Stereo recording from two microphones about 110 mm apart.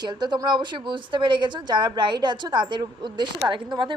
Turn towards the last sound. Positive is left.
turn(degrees=-45)  # may be behind; listen again after turning